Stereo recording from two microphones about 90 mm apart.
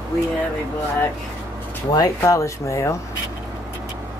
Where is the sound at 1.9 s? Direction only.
40° left (ahead or behind).